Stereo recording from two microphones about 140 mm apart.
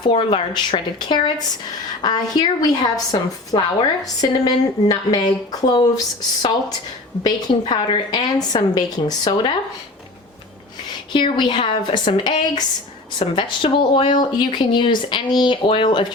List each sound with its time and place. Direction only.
0.0 s a woman's voice: 40° left (ahead or behind)
7.3 s a woman's voice: 30° left (ahead or behind)
11.1 s speech: 35° left (ahead or behind)